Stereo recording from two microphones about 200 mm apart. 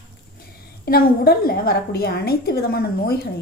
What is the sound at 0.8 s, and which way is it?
A woman's voice, 50° left (ahead or behind).